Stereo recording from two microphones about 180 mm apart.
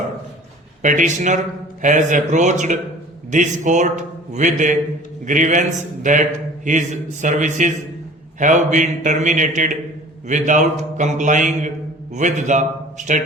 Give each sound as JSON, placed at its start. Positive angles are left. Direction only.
{"t": 0.8, "sound": "a man's voice", "side_deg": -45}